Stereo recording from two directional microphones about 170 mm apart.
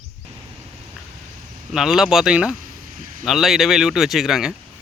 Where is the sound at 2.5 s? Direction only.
55° right (ahead or behind).